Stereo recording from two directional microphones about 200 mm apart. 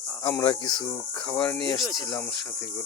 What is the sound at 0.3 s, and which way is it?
Speech, 15° left (ahead or behind).